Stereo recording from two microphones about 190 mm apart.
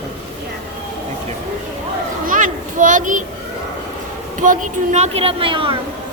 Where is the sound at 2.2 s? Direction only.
45° right (ahead or behind).